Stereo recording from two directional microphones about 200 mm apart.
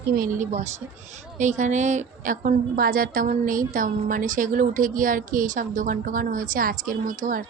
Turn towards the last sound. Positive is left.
turn(degrees=-40)  # may be behind; listen again after turning